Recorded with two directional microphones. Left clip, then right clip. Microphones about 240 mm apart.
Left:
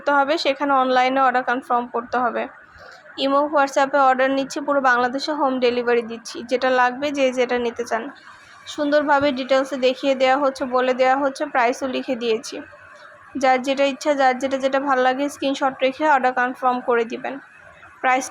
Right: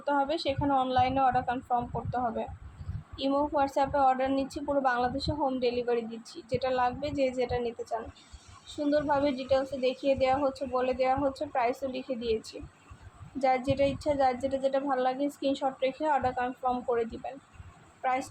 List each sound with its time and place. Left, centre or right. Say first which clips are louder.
0.0 s a woman's voice: left 10 dB; centre